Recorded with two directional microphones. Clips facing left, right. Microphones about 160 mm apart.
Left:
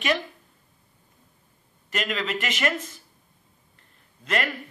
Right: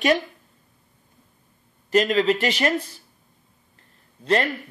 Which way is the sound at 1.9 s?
35° right (ahead or behind).